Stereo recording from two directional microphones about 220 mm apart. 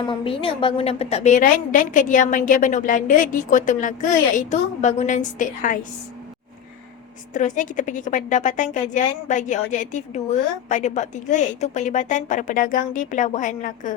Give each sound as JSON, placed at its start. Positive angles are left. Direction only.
{"t": 0.0, "sound": "a woman's voice", "side_deg": 25}
{"t": 7.3, "sound": "a woman's voice", "side_deg": 35}